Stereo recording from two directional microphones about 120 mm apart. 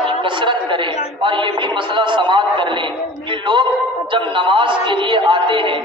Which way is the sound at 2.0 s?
40° right (ahead or behind).